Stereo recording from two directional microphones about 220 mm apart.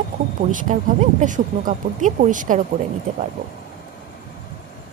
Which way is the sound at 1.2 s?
35° right (ahead or behind).